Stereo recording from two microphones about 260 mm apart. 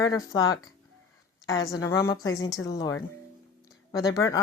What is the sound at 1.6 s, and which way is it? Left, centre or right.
Speech, centre.